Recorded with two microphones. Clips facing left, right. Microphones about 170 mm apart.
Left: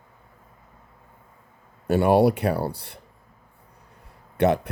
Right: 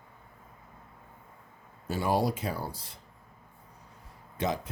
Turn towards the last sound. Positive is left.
turn(degrees=65)  # may be behind; listen again after turning